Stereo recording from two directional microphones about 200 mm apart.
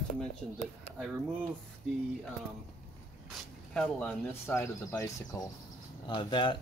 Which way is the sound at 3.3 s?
5° left (ahead or behind).